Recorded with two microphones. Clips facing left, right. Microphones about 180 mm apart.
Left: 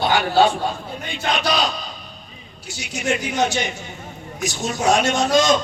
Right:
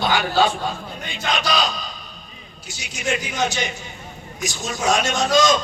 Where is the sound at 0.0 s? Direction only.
60° left (ahead or behind).